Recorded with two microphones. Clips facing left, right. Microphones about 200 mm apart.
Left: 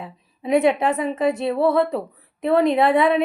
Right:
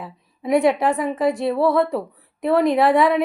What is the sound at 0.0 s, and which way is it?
A woman's voice, 20° left (ahead or behind).